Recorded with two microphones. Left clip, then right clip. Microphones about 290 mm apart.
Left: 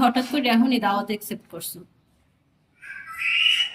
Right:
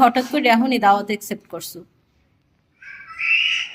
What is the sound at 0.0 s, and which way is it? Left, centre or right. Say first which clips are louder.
Speech: right 6 dB; centre.